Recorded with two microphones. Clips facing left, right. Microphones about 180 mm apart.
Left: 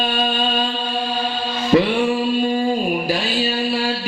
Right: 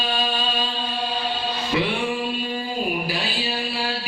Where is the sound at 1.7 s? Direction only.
45° left (ahead or behind).